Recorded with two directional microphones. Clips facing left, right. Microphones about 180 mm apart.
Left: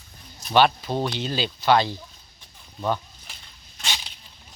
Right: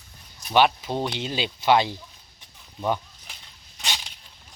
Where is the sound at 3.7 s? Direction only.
Centre (ahead or behind).